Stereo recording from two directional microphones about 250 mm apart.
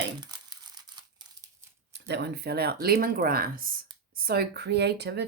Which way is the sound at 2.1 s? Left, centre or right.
Right.